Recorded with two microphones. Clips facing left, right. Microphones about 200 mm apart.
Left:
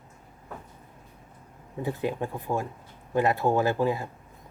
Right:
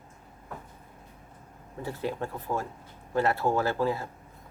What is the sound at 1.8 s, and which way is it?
Speech, 15° left (ahead or behind).